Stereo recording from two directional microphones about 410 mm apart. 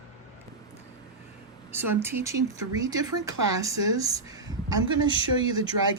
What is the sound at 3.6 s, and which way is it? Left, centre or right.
Speech, centre.